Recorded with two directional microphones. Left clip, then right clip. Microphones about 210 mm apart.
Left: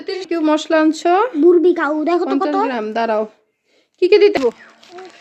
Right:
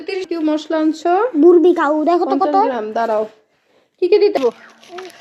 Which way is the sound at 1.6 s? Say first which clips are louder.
Right 2 dB; 10° left (ahead or behind).